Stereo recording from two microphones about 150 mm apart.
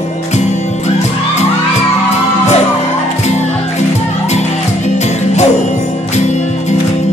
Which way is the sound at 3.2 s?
50° left (ahead or behind).